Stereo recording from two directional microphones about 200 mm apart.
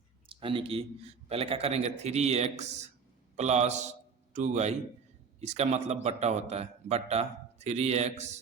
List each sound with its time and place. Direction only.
0.3 s a man's voice: 25° right (ahead or behind)